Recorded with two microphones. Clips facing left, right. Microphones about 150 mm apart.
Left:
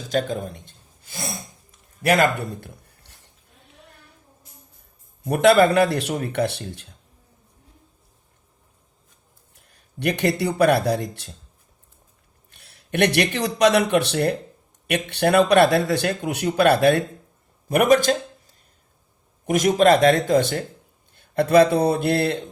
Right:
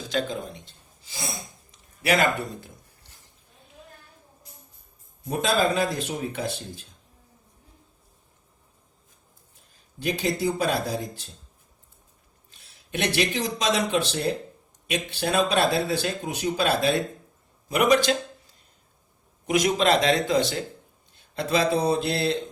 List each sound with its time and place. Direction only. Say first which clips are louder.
0.1 s speech: left 5 dB; 45° left (ahead or behind)
1.7 s a sound: left 4 dB; 50° left (ahead or behind)
5.2 s speech: left 8 dB; 65° left (ahead or behind)
9.6 s speech: left 8 dB; 70° left (ahead or behind)
12.5 s speech: left 6 dB; 60° left (ahead or behind)
17.7 s speech: left 4 dB; 50° left (ahead or behind)
19.5 s speech: left 5 dB; 45° left (ahead or behind)